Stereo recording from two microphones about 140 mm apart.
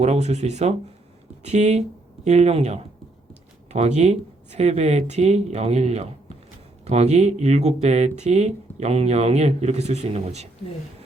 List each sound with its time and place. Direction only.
0.0 s speech: 50° right (ahead or behind)